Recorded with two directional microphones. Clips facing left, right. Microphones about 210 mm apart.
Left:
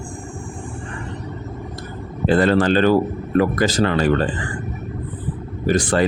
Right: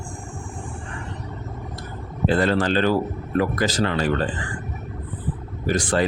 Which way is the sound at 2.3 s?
55° left (ahead or behind).